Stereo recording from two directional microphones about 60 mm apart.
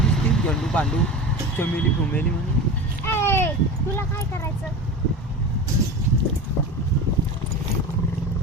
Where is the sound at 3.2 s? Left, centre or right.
Left.